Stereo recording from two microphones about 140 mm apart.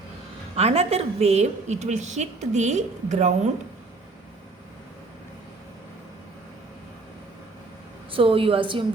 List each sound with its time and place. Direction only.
0.5 s a woman's voice: 45° right (ahead or behind)
8.1 s a woman's voice: 40° right (ahead or behind)